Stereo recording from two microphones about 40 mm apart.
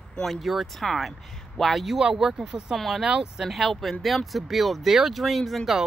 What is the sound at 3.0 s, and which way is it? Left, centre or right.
Speech, right.